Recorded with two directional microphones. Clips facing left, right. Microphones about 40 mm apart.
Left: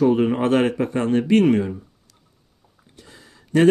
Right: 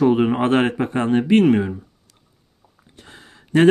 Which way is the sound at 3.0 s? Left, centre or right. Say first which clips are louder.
Right 3 dB; right.